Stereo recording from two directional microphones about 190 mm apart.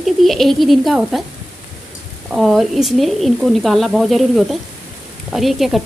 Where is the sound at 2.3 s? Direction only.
Centre (ahead or behind).